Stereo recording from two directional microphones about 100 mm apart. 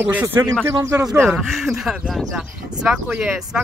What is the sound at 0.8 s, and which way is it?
Speech, 35° right (ahead or behind).